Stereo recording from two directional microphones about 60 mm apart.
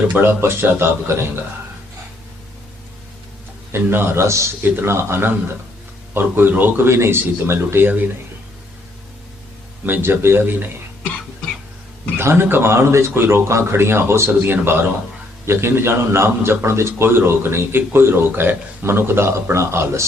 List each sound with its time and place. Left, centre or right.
0.2 s a man's voice: right
3.7 s a man's voice: right
6.1 s speech: right
6.8 s a man's voice: right
7.9 s speech: right
9.8 s speech: right
12.1 s a man's voice: right